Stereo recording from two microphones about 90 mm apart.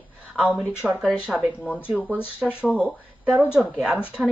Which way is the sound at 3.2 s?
20° right (ahead or behind).